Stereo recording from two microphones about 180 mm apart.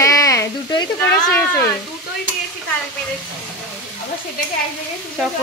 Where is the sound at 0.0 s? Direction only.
20° left (ahead or behind).